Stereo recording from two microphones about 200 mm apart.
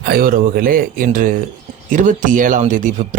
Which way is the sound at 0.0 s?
50° right (ahead or behind).